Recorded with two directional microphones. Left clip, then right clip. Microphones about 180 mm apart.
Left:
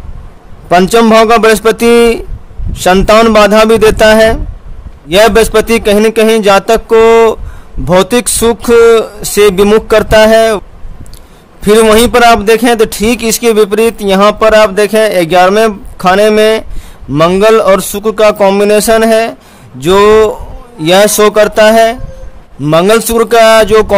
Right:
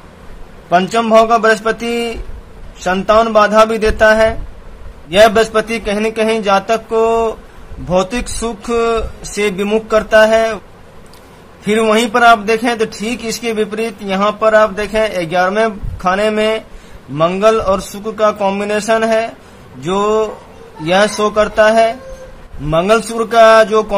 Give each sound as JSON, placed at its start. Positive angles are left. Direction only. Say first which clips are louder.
{"t": 0.7, "sound": "a man's voice", "louder": "left 7 dB", "side_deg": 65}
{"t": 11.6, "sound": "a man's voice", "louder": "left 8 dB", "side_deg": 65}